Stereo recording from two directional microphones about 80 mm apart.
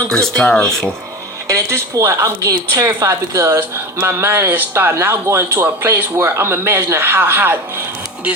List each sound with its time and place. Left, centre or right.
0.1 s speech: centre
1.5 s speech: right